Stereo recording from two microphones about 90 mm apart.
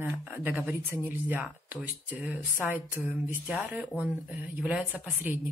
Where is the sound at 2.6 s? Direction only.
25° right (ahead or behind).